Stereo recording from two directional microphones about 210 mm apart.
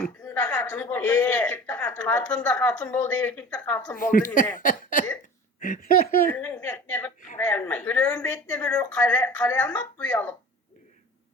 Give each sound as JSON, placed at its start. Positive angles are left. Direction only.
{"t": 0.0, "sound": "a man's voice", "side_deg": 5}
{"t": 3.9, "sound": "a sound", "side_deg": 40}
{"t": 5.5, "sound": "speech", "side_deg": 45}
{"t": 6.3, "sound": "a woman's voice", "side_deg": 10}